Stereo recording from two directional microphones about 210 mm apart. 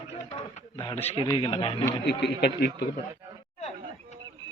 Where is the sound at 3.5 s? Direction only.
30° left (ahead or behind).